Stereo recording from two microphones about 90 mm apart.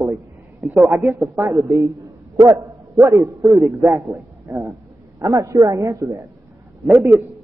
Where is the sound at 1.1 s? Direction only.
35° right (ahead or behind).